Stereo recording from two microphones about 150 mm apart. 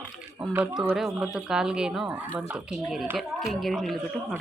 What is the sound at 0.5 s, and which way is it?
A woman's voice, 5° right (ahead or behind).